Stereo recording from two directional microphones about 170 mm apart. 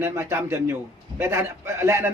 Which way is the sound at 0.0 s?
15° right (ahead or behind).